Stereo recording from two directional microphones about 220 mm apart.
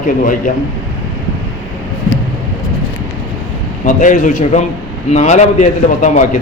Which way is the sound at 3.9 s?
35° left (ahead or behind).